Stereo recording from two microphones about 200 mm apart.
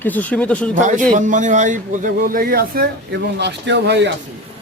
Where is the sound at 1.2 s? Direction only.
40° right (ahead or behind); by 4.1 s 60° right (ahead or behind).